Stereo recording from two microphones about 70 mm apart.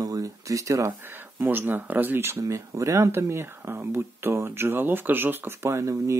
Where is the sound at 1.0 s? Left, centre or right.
Right.